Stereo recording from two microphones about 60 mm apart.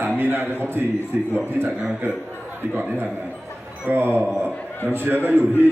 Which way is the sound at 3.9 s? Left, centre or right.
Right.